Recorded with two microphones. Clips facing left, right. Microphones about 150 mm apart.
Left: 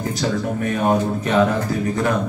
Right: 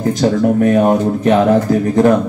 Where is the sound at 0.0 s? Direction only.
50° right (ahead or behind).